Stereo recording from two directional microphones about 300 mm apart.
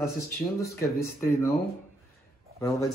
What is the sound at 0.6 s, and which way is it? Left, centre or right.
Speech, centre.